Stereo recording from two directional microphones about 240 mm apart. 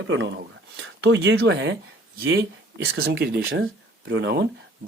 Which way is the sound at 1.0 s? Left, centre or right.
Right.